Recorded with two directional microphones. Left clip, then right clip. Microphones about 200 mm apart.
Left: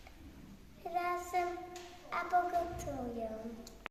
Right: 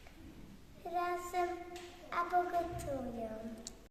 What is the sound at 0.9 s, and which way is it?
Child singing, 10° right (ahead or behind).